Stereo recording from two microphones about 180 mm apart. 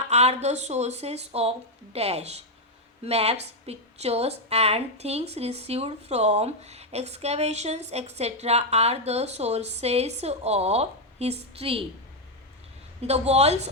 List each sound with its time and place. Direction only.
0.1 s a woman's voice: 35° right (ahead or behind)
13.0 s a woman's voice: 35° right (ahead or behind)